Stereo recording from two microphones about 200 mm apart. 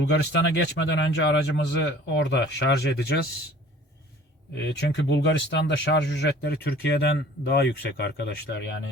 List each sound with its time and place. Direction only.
0.0 s speech: 65° left (ahead or behind)
4.8 s speech: 60° left (ahead or behind)